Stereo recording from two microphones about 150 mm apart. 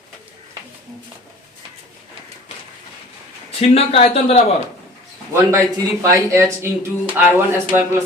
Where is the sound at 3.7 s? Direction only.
40° left (ahead or behind).